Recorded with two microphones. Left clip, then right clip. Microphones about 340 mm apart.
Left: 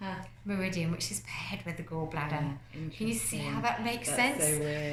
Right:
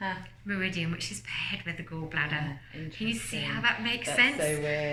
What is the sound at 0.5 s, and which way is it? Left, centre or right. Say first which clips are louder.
A woman's voice: right 3 dB; centre.